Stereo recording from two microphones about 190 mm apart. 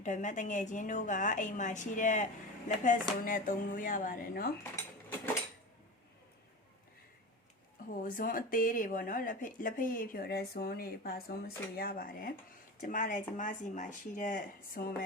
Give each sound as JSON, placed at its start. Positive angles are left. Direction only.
{"t": 0.0, "sound": "a woman's voice", "side_deg": 40}
{"t": 4.6, "sound": "mechanisms", "side_deg": 10}
{"t": 7.9, "sound": "speech", "side_deg": 45}